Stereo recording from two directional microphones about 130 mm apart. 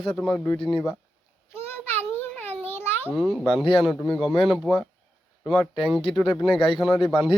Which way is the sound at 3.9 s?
5° left (ahead or behind).